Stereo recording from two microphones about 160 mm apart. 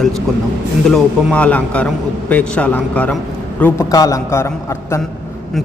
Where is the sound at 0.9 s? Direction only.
5° left (ahead or behind).